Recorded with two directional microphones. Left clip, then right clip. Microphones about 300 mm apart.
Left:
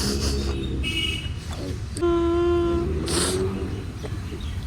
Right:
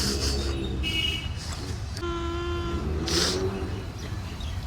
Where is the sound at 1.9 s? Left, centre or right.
Centre.